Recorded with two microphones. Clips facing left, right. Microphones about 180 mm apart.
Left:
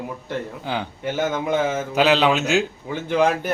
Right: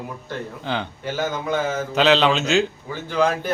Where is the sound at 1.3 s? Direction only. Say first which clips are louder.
Left 2 dB; 20° left (ahead or behind).